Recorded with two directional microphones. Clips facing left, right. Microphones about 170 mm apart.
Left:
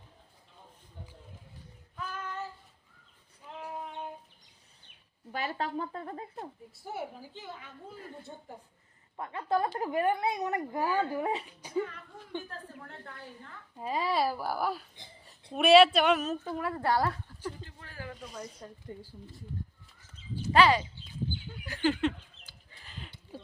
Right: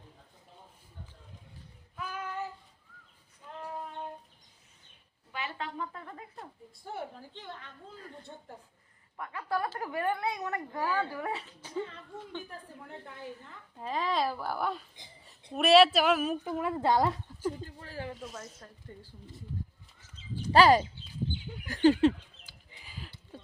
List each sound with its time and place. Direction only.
2.0 s child singing: 5° right (ahead or behind)
3.6 s child singing: 5° left (ahead or behind)
5.3 s speech: 40° left (ahead or behind)
6.8 s a woman's voice: 5° left (ahead or behind)
9.1 s a woman's voice: 25° left (ahead or behind)
11.8 s a woman's voice: 25° right (ahead or behind)
13.7 s a woman's voice: 10° left (ahead or behind)
16.3 s speech: 15° right (ahead or behind)
17.6 s a sound: 35° right (ahead or behind)
18.1 s speech: centre (ahead or behind)
18.9 s a woman's voice: 10° left (ahead or behind)
20.5 s a sound: 40° right (ahead or behind)
22.4 s a sound: 10° right (ahead or behind)